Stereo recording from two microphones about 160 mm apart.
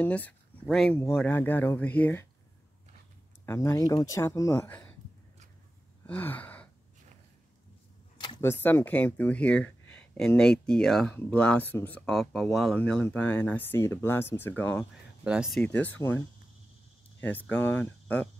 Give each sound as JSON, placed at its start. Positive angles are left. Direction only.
{"t": 0.0, "sound": "speech", "side_deg": 10}
{"t": 3.4, "sound": "speech", "side_deg": 15}
{"t": 6.0, "sound": "gasp", "side_deg": 10}
{"t": 8.4, "sound": "speech", "side_deg": 15}
{"t": 15.2, "sound": "speech", "side_deg": -5}
{"t": 15.6, "sound": "speech", "side_deg": 10}